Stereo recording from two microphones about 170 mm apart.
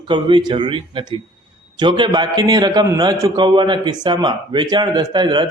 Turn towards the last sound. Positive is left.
turn(degrees=-25)  # may be behind; listen again after turning